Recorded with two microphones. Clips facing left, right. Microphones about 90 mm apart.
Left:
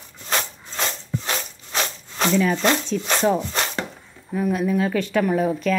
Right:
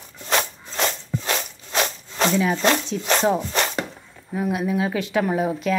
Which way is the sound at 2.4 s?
20° right (ahead or behind).